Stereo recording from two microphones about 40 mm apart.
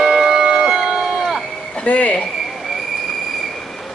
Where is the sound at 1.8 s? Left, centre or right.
Left.